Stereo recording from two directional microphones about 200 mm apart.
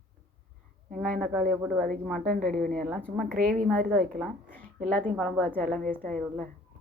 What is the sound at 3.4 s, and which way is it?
Speech, 40° right (ahead or behind).